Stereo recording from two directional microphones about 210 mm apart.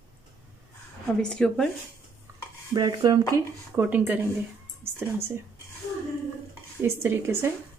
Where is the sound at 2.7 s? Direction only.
20° right (ahead or behind).